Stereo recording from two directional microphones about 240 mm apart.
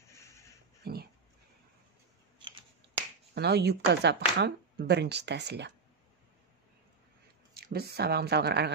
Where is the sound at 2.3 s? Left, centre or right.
Centre.